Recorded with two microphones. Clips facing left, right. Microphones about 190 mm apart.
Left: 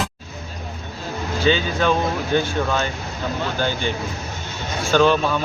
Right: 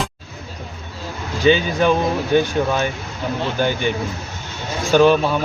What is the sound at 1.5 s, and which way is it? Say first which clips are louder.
Speech: right 4 dB; 15° right (ahead or behind).